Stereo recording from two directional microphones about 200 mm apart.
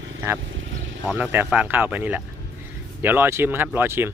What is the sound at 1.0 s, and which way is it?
Speech, 10° right (ahead or behind).